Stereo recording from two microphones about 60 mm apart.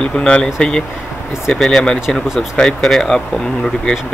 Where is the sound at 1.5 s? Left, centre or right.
Centre.